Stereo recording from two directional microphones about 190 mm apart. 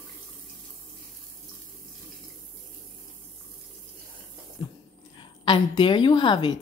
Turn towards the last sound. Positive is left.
turn(degrees=25)  # may be behind; listen again after turning